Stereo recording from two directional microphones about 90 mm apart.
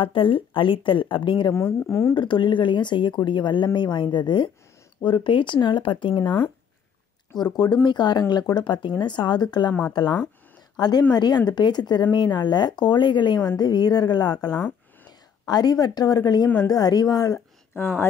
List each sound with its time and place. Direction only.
0.0 s speech: 75° left (ahead or behind)
1.5 s speech: 30° left (ahead or behind)
2.1 s speech: 60° left (ahead or behind)
7.3 s speech: 50° left (ahead or behind)
13.4 s a woman's voice: 45° left (ahead or behind)
17.7 s speech: 25° left (ahead or behind)